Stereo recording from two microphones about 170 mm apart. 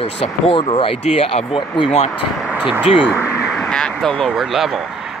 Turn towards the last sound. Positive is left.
turn(degrees=0)  # may be behind; listen again after turning